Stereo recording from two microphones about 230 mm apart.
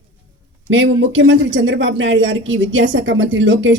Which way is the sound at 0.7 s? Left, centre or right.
Right.